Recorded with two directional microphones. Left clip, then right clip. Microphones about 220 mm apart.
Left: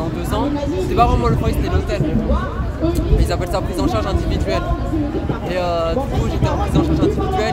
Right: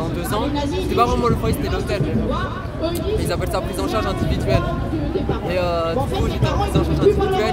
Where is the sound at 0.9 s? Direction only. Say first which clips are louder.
Left 2 dB; 5° right (ahead or behind).